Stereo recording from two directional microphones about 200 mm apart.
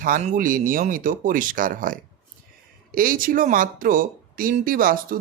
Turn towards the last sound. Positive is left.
turn(degrees=-45)  # may be behind; listen again after turning